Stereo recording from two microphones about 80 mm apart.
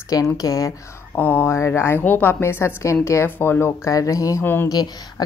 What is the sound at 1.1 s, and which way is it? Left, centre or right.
Speech, left.